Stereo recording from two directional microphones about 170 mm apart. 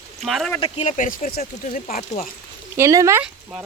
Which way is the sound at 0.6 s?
35° left (ahead or behind).